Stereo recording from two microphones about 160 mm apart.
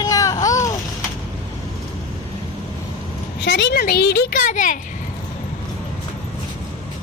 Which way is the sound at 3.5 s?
90° left.